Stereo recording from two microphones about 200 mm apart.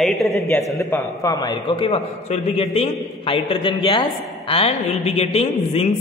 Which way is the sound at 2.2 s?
35° left (ahead or behind).